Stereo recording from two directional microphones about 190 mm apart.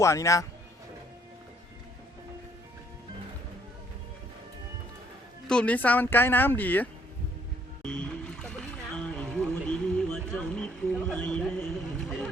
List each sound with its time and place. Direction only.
0.0 s speech: 15° left (ahead or behind)
5.5 s speech: 5° left (ahead or behind)
7.8 s a sound: 5° left (ahead or behind)